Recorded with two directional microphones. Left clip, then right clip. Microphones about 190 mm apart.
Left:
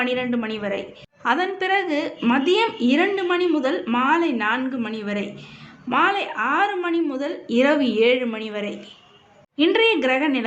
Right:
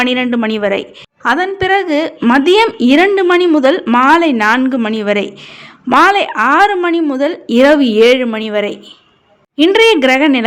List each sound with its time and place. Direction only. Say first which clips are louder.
0.0 s a woman's voice: right 9 dB; 50° right (ahead or behind)